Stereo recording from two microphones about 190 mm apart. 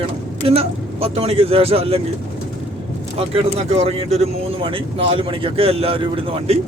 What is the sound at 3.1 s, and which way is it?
Speech, 30° right (ahead or behind).